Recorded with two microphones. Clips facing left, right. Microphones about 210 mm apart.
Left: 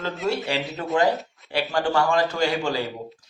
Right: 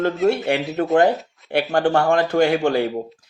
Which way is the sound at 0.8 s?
60° right (ahead or behind).